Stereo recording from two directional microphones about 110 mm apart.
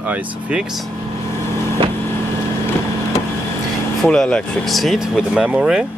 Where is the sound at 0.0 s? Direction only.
15° right (ahead or behind).